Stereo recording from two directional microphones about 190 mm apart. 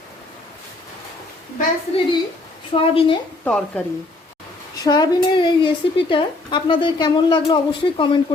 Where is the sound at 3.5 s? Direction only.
5° left (ahead or behind).